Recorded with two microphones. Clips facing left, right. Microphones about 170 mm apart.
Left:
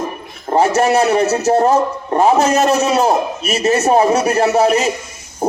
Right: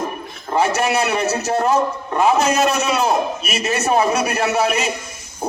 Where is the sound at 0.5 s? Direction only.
40° left (ahead or behind).